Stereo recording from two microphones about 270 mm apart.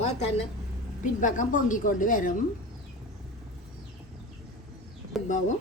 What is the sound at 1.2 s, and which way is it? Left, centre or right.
Speech, left.